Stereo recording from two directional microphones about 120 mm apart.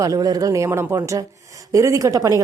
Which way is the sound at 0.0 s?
30° right (ahead or behind).